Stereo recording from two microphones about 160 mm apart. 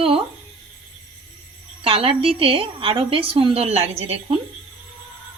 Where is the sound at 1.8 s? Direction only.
35° right (ahead or behind).